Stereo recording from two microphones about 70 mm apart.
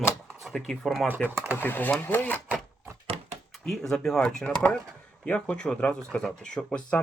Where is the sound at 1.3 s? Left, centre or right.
Right.